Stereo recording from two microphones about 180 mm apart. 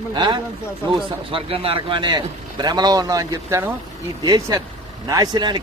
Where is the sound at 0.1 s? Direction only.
25° right (ahead or behind).